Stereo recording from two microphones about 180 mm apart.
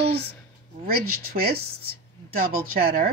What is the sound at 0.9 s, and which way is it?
Speech, 60° right (ahead or behind).